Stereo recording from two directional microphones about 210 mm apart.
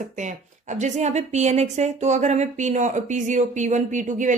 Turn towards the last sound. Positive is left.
turn(degrees=-35)  # may be behind; listen again after turning